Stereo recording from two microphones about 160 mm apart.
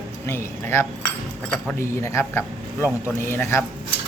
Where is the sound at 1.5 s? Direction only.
15° left (ahead or behind).